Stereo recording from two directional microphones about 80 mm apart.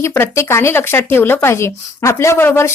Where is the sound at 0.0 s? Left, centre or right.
Left.